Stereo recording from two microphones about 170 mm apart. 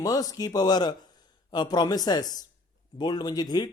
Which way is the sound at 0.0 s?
20° left (ahead or behind).